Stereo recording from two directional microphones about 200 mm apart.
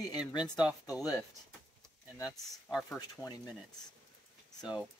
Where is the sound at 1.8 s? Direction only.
Centre (ahead or behind).